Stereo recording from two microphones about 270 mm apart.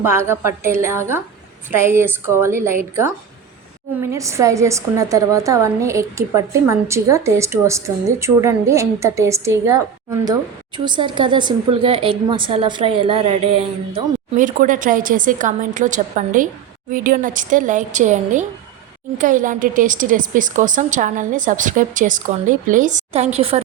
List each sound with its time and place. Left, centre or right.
0.0 s a woman's voice: centre
4.0 s a woman's voice: centre